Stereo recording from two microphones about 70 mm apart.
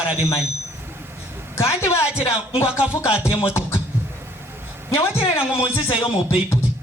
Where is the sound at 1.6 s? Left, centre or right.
Left.